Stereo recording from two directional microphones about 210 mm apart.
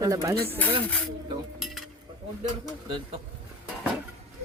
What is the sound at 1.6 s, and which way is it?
Cutlery, centre (ahead or behind).